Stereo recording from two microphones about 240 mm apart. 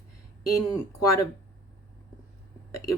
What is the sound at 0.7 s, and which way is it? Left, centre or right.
Speech, centre.